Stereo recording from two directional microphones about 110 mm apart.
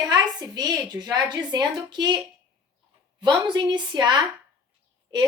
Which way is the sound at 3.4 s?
45° right (ahead or behind).